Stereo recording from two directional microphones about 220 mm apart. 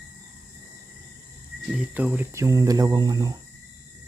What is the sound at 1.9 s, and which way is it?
Speech, 5° right (ahead or behind).